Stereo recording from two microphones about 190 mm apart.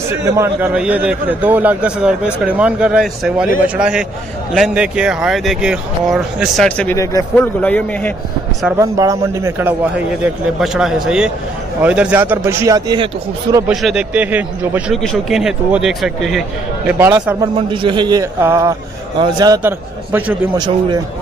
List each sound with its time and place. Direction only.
0.1 s a man's voice: 15° right (ahead or behind); by 8.1 s 10° left (ahead or behind)
8.7 s a man's voice: 20° right (ahead or behind)
13.7 s a man's voice: 5° right (ahead or behind)
16.8 s a man's voice: 10° right (ahead or behind)
17.8 s a man's voice: 25° right (ahead or behind)
20.5 s speech: 20° right (ahead or behind)